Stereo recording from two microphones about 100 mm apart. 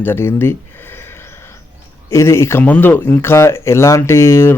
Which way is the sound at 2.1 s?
30° left (ahead or behind).